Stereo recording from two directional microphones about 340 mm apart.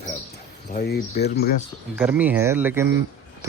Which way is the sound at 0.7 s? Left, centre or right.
Left.